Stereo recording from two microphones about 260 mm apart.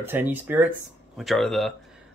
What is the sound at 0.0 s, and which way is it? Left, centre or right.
Speech, centre.